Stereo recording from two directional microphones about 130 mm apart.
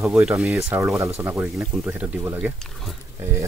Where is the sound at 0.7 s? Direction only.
25° right (ahead or behind).